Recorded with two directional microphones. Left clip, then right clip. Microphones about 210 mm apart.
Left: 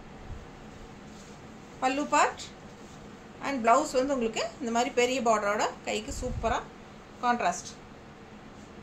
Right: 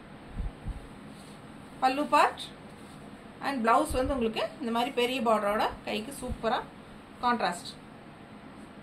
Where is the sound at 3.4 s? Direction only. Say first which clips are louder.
Left 1 dB; 20° left (ahead or behind).